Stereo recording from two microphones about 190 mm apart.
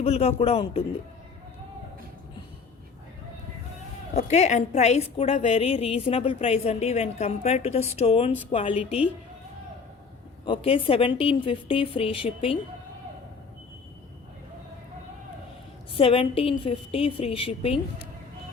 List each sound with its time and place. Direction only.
0.0 s a woman's voice: 35° left (ahead or behind)
4.1 s a woman's voice: 35° left (ahead or behind)
10.4 s a woman's voice: 30° left (ahead or behind)
16.0 s a woman's voice: 30° left (ahead or behind)